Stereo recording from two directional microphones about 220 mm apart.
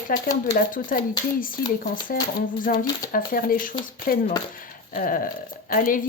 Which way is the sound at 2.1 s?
40° left (ahead or behind).